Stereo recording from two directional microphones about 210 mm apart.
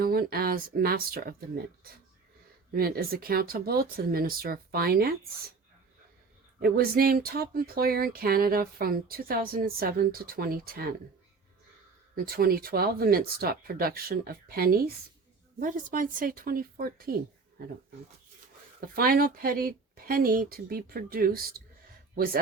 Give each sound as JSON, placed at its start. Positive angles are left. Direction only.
{"t": 0.0, "sound": "speech", "side_deg": -45}
{"t": 2.7, "sound": "speech", "side_deg": -45}
{"t": 6.6, "sound": "speech", "side_deg": -45}
{"t": 12.1, "sound": "speech", "side_deg": -45}
{"t": 18.9, "sound": "speech", "side_deg": -45}